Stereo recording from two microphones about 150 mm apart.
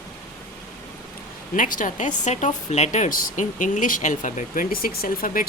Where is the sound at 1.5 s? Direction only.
60° left (ahead or behind).